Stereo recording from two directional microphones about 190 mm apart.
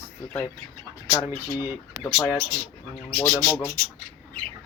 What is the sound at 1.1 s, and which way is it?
Speech, 20° left (ahead or behind).